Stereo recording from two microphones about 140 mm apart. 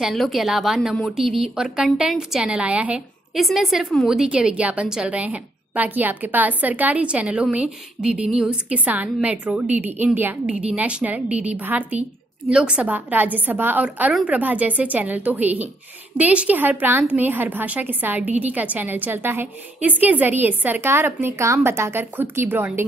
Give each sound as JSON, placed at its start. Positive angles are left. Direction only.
{"t": 0.0, "sound": "a woman's voice", "side_deg": 0}